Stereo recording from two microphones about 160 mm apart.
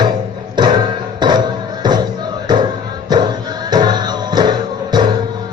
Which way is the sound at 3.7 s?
25° right (ahead or behind).